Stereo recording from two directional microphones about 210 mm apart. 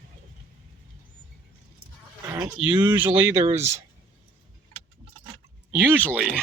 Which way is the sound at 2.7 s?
20° right (ahead or behind).